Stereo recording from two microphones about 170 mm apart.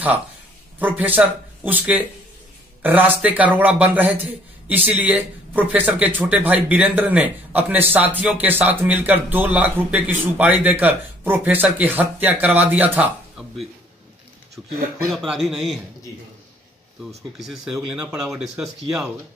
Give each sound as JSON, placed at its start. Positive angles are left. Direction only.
{"t": 0.7, "sound": "speech", "side_deg": -10}
{"t": 15.0, "sound": "speech", "side_deg": 0}
{"t": 17.4, "sound": "speech", "side_deg": 0}